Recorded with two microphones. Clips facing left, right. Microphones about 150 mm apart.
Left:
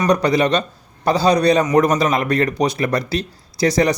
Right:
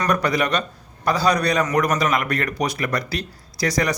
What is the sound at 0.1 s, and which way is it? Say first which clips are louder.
Speech: left 5 dB; 25° left (ahead or behind).